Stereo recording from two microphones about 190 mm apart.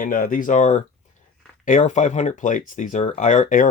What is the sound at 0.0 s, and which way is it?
Speech, 45° left (ahead or behind).